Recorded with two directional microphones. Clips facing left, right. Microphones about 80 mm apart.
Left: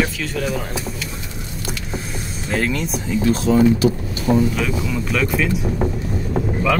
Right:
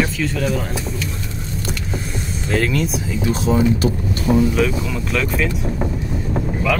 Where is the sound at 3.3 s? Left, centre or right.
Centre.